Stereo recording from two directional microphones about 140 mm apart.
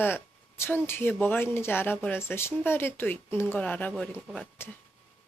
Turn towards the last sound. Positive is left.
turn(degrees=15)  # may be behind; listen again after turning